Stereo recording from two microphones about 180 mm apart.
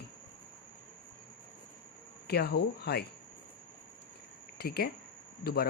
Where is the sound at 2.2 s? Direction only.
65° left (ahead or behind).